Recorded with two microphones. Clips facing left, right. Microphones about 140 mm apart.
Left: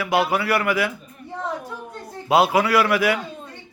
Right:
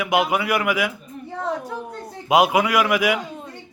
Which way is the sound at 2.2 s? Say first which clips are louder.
Even; 15° right (ahead or behind).